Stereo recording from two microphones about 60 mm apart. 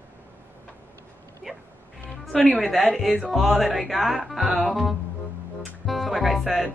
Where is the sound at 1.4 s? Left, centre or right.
Centre.